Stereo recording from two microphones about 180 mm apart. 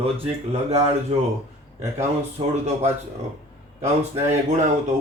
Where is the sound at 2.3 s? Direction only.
35° right (ahead or behind).